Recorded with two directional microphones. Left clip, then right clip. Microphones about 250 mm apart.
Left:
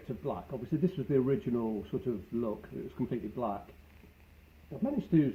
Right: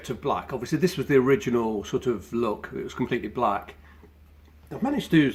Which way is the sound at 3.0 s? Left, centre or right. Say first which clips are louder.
Right 8 dB; right.